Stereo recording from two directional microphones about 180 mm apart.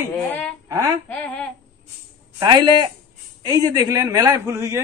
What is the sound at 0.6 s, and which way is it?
Speech, 20° right (ahead or behind).